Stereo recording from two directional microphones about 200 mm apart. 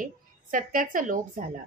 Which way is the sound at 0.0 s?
45° right (ahead or behind).